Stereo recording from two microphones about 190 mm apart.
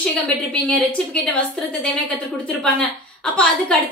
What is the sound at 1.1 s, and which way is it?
Speech, 5° left (ahead or behind).